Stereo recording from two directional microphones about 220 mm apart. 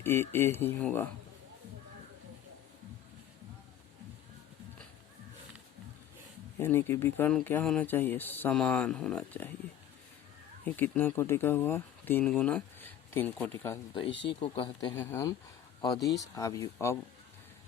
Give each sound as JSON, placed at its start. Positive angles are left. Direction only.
{"t": 0.0, "sound": "speech", "side_deg": 10}
{"t": 6.6, "sound": "speech", "side_deg": 10}
{"t": 10.7, "sound": "speech", "side_deg": 10}
{"t": 14.1, "sound": "speech", "side_deg": 55}
{"t": 14.4, "sound": "speech", "side_deg": 25}
{"t": 14.9, "sound": "speech", "side_deg": 10}